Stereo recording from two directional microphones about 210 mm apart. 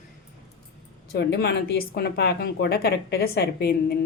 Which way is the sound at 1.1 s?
50° left (ahead or behind).